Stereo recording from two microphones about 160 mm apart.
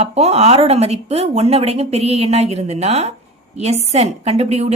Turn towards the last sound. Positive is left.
turn(degrees=-40)  # may be behind; listen again after turning